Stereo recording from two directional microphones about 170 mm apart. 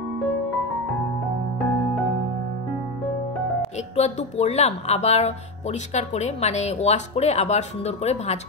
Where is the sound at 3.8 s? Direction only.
40° left (ahead or behind).